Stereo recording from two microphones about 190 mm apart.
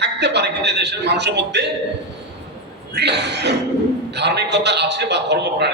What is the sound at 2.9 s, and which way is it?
A man's voice, 60° right (ahead or behind).